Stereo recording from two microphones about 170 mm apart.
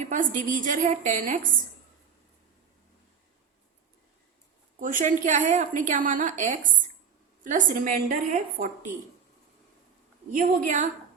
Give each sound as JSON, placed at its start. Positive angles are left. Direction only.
{"t": 0.1, "sound": "a woman's voice", "side_deg": -50}
{"t": 4.8, "sound": "a woman's voice", "side_deg": -50}
{"t": 10.3, "sound": "a woman's voice", "side_deg": -50}